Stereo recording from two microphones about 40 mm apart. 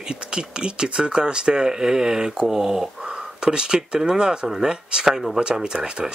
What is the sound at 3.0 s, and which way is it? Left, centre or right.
Speech, right.